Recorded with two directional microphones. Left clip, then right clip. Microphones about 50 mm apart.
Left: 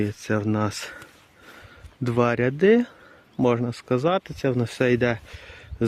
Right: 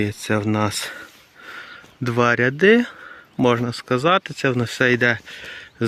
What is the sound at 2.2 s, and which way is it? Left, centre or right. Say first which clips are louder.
Speech: right 4 dB; centre.